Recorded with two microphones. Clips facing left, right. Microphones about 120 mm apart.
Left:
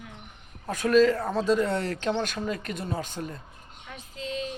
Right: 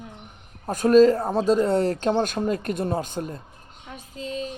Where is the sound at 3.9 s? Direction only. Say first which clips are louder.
Right 2 dB; 40° right (ahead or behind).